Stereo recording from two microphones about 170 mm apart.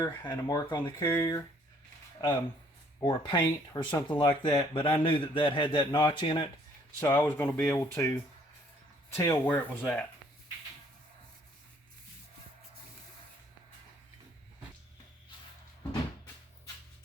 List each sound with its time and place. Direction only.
0.0 s speech: 20° left (ahead or behind)
3.0 s speech: 25° left (ahead or behind)
7.0 s speech: 10° left (ahead or behind)
9.1 s speech: 15° left (ahead or behind)